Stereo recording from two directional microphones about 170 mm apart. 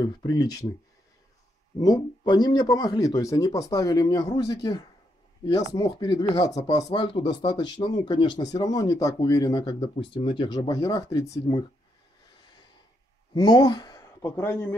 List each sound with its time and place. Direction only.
0.0 s speech: 25° left (ahead or behind)
1.8 s speech: 25° left (ahead or behind)
13.3 s speech: 25° left (ahead or behind)